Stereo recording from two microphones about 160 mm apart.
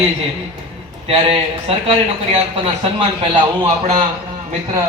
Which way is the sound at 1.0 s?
35° right (ahead or behind).